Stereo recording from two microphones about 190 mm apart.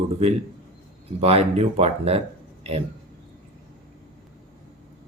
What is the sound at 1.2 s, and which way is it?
Speech, 30° right (ahead or behind).